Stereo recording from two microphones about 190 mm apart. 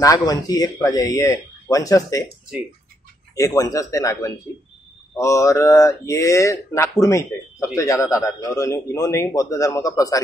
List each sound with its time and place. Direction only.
0.0 s speech: 20° left (ahead or behind)
3.3 s speech: 15° left (ahead or behind)